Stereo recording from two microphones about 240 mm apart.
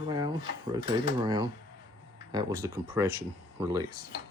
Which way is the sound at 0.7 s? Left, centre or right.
Right.